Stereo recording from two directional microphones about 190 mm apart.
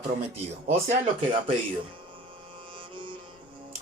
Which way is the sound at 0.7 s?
35° right (ahead or behind).